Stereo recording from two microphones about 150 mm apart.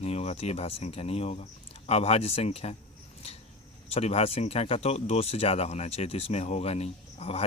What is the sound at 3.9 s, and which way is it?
Speech, 40° left (ahead or behind).